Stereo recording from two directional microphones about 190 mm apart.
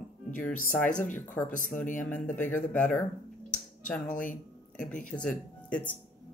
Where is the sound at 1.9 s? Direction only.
45° left (ahead or behind).